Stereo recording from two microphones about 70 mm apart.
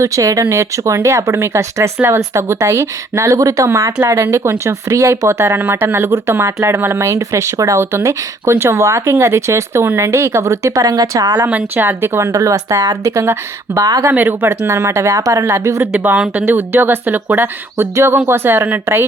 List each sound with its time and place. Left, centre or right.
0.0 s speech: right
11.4 s speech: right
12.3 s speech: right
13.7 s speech: right
14.1 s speech: right
15.9 s speech: centre
16.5 s speech: right